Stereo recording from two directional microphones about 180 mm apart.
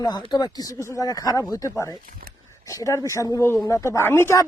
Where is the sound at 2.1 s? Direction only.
55° right (ahead or behind).